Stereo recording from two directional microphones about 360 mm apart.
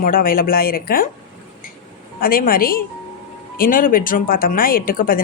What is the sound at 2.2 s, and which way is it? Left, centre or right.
A woman's voice, left.